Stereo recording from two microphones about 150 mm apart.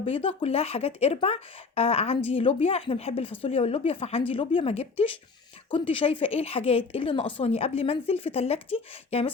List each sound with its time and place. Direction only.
0.0 s speech: 40° left (ahead or behind)